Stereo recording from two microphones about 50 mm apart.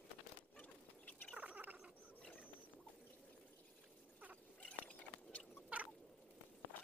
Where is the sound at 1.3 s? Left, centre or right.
Right.